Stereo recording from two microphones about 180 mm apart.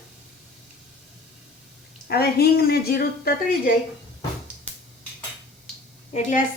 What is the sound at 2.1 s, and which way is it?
Speech, 60° left (ahead or behind).